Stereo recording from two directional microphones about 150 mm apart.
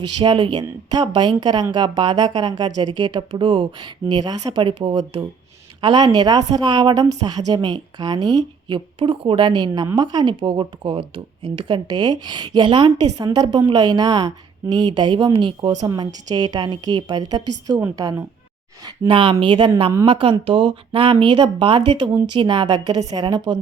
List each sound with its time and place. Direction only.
0.2 s a woman's voice: 35° right (ahead or behind)